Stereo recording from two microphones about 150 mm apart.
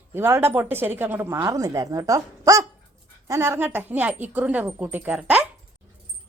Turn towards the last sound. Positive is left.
turn(degrees=-10)  # may be behind; listen again after turning